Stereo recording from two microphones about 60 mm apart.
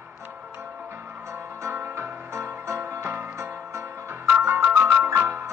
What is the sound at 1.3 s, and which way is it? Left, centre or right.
Music, right.